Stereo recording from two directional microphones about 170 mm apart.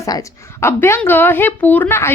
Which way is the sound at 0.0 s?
20° left (ahead or behind).